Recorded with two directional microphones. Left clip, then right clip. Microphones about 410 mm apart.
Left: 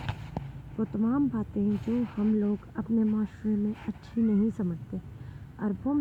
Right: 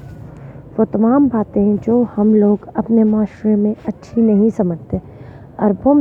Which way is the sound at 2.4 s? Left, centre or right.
Right.